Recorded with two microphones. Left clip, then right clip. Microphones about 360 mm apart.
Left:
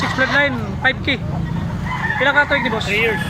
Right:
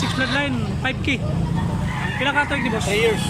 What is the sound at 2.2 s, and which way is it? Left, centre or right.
Speech, centre.